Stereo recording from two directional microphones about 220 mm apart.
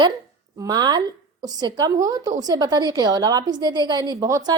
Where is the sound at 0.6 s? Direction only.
20° right (ahead or behind).